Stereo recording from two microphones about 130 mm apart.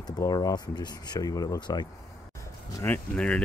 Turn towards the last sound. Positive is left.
turn(degrees=5)  # may be behind; listen again after turning